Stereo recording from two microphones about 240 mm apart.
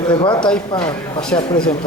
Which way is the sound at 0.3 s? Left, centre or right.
Centre.